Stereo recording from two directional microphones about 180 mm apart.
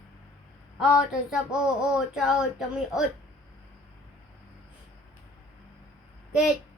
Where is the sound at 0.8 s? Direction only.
5° right (ahead or behind).